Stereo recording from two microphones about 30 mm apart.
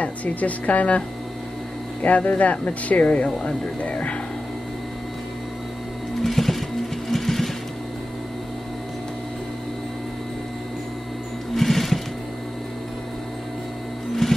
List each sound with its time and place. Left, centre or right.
0.0 s speech: left
2.0 s speech: left
6.2 s music: centre
7.1 s sewing machine: centre
11.5 s music: centre
14.2 s music: centre